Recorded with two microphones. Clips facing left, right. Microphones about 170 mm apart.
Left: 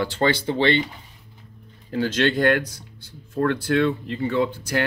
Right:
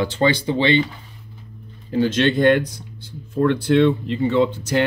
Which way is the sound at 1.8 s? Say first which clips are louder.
Right 4 dB; 20° right (ahead or behind).